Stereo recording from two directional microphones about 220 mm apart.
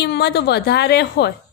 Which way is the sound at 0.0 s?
50° left (ahead or behind).